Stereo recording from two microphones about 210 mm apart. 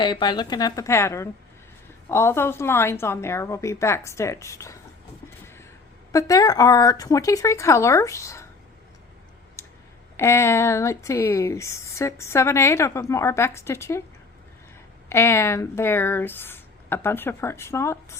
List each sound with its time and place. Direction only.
0.0 s a woman's voice: 20° left (ahead or behind)
6.1 s speech: 15° left (ahead or behind)
10.2 s speech: 10° left (ahead or behind)
15.1 s speech: 10° left (ahead or behind)